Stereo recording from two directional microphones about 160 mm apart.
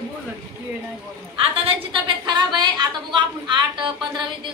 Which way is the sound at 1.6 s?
30° right (ahead or behind).